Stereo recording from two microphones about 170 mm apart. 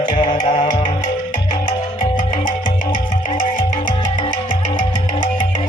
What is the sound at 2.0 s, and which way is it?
Music, 50° left (ahead or behind).